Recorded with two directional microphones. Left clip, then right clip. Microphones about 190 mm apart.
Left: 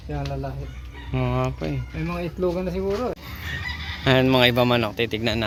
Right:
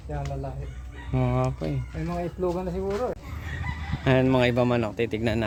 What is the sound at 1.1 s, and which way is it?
Speech, 10° right (ahead or behind).